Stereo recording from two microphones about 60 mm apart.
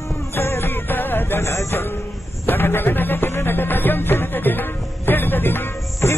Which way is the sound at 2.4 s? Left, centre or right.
Left.